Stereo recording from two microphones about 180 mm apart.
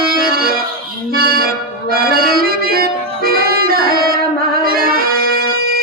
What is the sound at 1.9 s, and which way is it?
Music, 55° right (ahead or behind).